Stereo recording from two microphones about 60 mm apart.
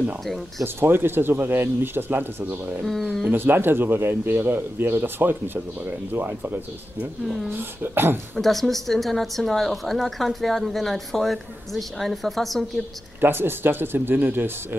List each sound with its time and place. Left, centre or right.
0.7 s speech: right
2.8 s speech: centre
3.3 s speech: right
7.2 s speech: centre
7.5 s speech: right
8.4 s speech: centre
13.2 s speech: right